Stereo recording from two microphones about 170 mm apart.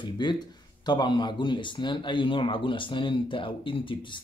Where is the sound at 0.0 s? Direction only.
25° left (ahead or behind).